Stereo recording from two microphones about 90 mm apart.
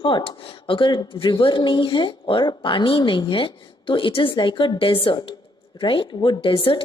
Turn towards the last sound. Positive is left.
turn(degrees=70)  # may be behind; listen again after turning